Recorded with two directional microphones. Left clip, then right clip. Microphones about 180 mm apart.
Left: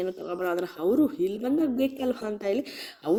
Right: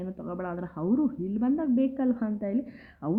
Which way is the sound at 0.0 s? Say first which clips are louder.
Left 6 dB; 20° left (ahead or behind).